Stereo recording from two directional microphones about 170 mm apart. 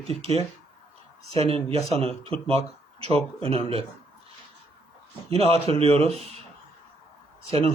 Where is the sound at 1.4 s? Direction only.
35° right (ahead or behind).